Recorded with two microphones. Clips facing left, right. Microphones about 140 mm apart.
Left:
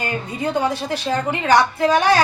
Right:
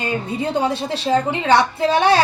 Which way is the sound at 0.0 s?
25° right (ahead or behind).